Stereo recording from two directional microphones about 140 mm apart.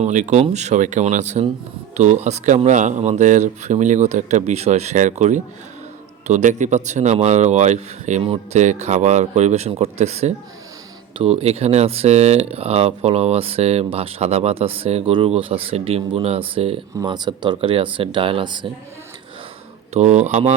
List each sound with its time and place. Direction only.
0.0 s speech: 60° right (ahead or behind); by 16.8 s 40° right (ahead or behind)
17.0 s speech: 30° right (ahead or behind)
19.9 s speech: 55° right (ahead or behind)